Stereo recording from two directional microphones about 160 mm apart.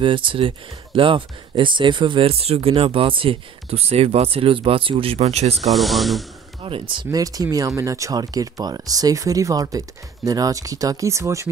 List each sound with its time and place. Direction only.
0.0 s speech: 30° right (ahead or behind)
5.7 s speech: centre (ahead or behind)
6.6 s speech: 35° right (ahead or behind)